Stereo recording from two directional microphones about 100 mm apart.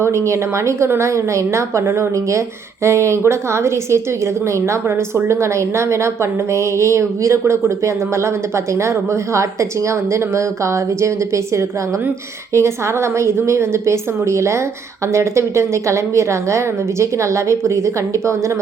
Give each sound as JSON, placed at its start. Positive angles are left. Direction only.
{"t": 0.0, "sound": "speech", "side_deg": -30}
{"t": 12.5, "sound": "a woman's voice", "side_deg": -30}